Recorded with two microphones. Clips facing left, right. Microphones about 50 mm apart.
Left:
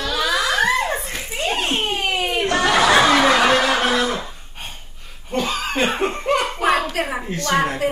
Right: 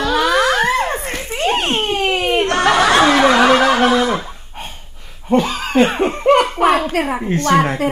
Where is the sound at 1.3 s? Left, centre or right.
Right.